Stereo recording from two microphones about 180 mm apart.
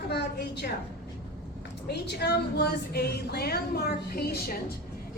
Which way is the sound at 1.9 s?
65° left (ahead or behind).